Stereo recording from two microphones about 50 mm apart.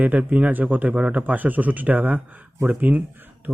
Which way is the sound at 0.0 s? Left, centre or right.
Right.